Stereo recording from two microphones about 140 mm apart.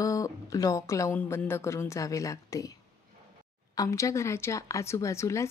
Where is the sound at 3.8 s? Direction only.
20° left (ahead or behind).